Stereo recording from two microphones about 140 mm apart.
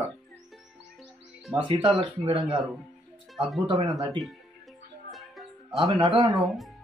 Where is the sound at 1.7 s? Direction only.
35° right (ahead or behind).